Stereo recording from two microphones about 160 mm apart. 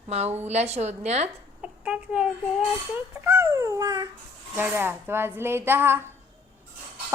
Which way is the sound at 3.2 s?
15° right (ahead or behind).